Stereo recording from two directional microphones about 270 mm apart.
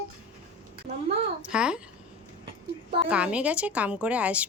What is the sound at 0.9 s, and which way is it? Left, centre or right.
Speech, right.